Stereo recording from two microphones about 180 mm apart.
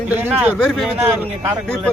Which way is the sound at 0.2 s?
10° right (ahead or behind).